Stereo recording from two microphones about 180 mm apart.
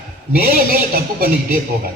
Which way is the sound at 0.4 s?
55° right (ahead or behind).